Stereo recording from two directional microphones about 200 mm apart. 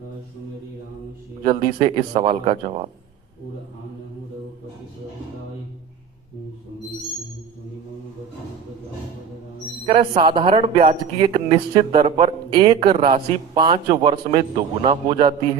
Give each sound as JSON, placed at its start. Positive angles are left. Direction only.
{"t": 1.5, "sound": "a man's voice", "side_deg": -25}
{"t": 9.8, "sound": "a man's voice", "side_deg": -30}